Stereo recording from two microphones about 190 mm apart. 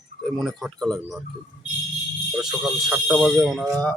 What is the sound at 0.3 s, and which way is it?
Speech, centre (ahead or behind).